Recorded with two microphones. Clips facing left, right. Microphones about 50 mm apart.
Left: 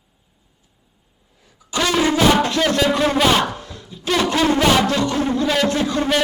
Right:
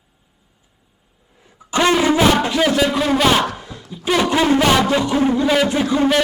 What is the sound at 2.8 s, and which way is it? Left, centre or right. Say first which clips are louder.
Speech: even; centre.